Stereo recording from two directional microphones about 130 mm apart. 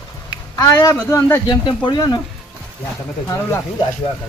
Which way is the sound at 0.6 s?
25° left (ahead or behind).